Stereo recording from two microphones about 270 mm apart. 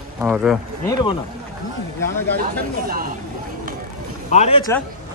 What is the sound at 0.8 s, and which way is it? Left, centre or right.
Speech, centre.